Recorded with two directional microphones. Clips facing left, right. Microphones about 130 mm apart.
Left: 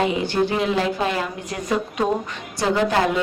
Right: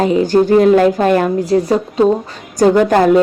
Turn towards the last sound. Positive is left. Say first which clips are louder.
# right 9 dB
turn(degrees=-50)  # may be behind; listen again after turning